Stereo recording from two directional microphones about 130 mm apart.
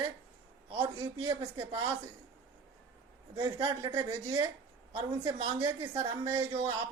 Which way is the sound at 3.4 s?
35° right (ahead or behind).